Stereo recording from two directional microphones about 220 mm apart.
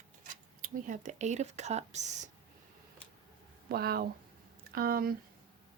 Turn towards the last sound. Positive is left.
turn(degrees=-40)  # may be behind; listen again after turning